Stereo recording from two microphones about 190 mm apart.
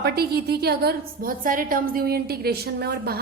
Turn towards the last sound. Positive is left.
turn(degrees=-55)  # may be behind; listen again after turning